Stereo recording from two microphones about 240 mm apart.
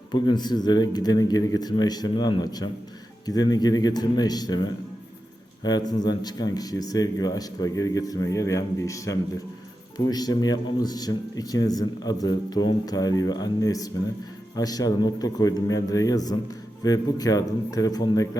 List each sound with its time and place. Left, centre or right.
0.1 s speech: centre